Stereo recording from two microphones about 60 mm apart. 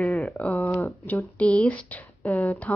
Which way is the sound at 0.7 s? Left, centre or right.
Left.